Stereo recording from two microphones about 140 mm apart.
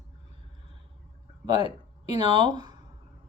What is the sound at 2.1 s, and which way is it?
Speech, 35° right (ahead or behind).